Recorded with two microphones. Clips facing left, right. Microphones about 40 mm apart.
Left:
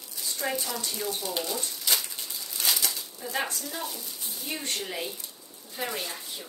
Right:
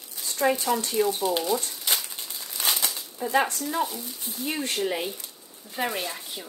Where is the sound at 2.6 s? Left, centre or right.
Right.